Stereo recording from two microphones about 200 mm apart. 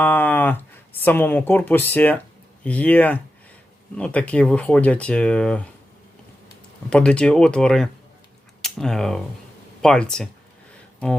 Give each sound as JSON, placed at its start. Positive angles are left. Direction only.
{"t": 0.0, "sound": "speech", "side_deg": 10}
{"t": 6.9, "sound": "speech", "side_deg": 5}